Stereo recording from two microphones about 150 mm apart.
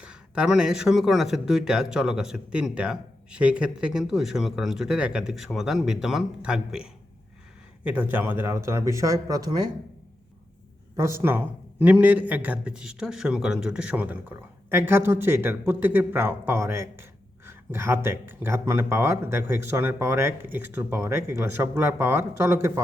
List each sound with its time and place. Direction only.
0.0 s speech: 5° right (ahead or behind); by 9.6 s 25° right (ahead or behind)
11.2 s a man's voice: 15° right (ahead or behind)